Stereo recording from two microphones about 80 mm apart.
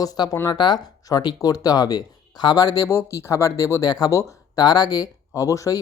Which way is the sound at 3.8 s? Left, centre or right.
Left.